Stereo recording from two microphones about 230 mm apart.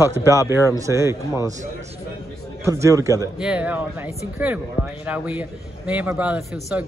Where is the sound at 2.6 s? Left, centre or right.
Centre.